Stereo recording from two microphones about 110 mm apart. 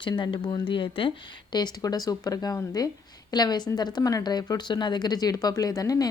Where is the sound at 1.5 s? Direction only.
40° left (ahead or behind).